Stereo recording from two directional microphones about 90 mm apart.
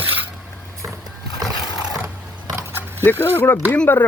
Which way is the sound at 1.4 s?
45° right (ahead or behind).